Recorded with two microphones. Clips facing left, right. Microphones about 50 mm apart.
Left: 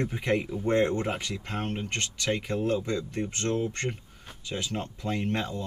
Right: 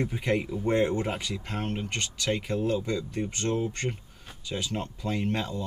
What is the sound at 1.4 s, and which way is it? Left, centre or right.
Speech, centre.